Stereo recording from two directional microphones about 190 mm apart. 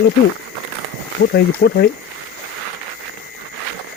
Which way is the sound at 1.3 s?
60° left (ahead or behind).